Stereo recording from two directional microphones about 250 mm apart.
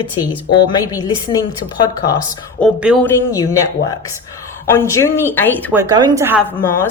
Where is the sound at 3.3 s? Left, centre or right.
Centre.